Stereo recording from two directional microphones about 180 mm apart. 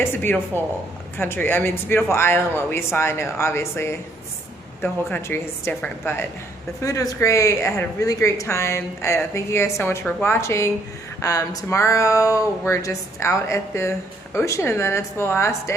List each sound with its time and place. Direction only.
0.0 s a woman's voice: 10° left (ahead or behind)
5.0 s a woman's voice: 10° left (ahead or behind)